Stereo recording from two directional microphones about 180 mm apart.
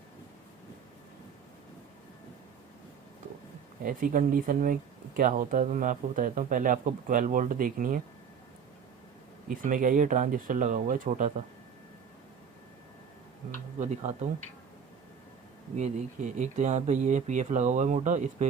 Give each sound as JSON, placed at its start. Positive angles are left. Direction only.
{"t": 3.8, "sound": "speech", "side_deg": -50}
{"t": 9.5, "sound": "speech", "side_deg": -45}
{"t": 13.7, "sound": "speech", "side_deg": -40}
{"t": 15.7, "sound": "speech", "side_deg": -40}